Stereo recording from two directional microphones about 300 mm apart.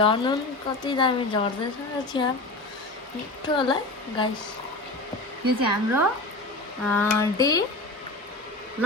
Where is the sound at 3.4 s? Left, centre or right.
Centre.